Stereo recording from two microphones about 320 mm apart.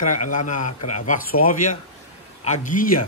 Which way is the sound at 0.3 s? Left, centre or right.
Left.